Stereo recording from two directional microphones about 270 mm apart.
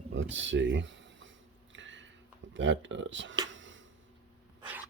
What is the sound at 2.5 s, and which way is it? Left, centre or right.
Speech, right.